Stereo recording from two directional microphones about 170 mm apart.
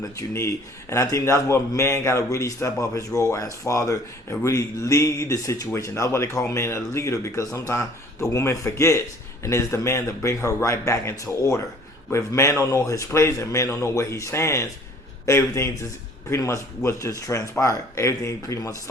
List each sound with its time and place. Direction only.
0.2 s a man's voice: 15° left (ahead or behind)